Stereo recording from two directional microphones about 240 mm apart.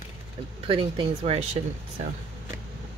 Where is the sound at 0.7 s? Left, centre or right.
Right.